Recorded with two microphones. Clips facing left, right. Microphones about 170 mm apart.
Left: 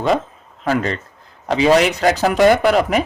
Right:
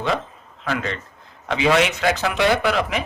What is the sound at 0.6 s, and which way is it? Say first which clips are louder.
Speech: left 6 dB; 35° left (ahead or behind).